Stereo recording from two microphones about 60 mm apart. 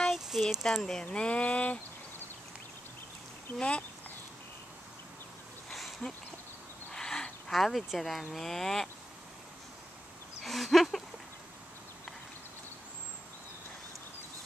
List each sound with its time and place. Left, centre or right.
0.1 s a sound: centre
1.0 s speech: centre
3.5 s speech: left
6.0 s speech: left
6.9 s a sound: centre
7.5 s speech: centre
10.4 s speech: centre